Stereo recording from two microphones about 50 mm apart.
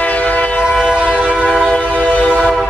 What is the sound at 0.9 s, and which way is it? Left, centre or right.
Train, right.